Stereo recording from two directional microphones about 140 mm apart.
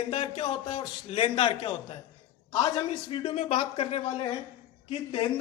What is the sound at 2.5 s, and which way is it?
A man's voice, 25° left (ahead or behind).